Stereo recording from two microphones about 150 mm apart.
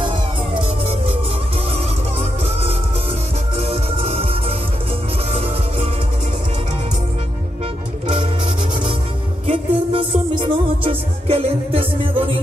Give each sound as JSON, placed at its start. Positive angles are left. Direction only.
{"t": 0.6, "sound": "music", "side_deg": -40}
{"t": 2.1, "sound": "music", "side_deg": -40}
{"t": 9.5, "sound": "music", "side_deg": -40}